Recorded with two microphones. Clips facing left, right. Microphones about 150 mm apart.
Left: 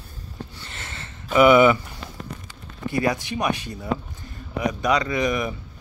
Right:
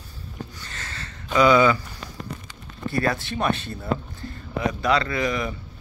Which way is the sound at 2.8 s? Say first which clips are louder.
Left 1 dB; 15° left (ahead or behind).